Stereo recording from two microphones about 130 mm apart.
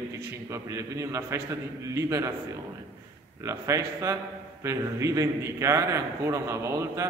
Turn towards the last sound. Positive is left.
turn(degrees=-20)  # may be behind; listen again after turning